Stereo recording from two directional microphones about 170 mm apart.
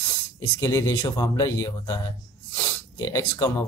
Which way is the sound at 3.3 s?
20° left (ahead or behind).